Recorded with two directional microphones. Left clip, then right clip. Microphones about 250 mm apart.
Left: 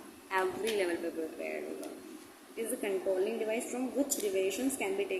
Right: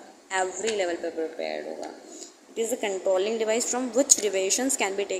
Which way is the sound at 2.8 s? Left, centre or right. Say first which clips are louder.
Right 6 dB; right.